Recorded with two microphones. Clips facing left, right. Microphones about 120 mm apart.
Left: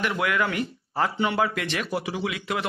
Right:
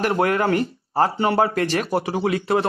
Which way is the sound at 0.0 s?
45° right (ahead or behind).